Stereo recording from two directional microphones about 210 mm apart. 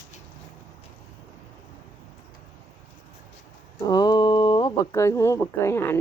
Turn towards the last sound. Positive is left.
turn(degrees=10)  # may be behind; listen again after turning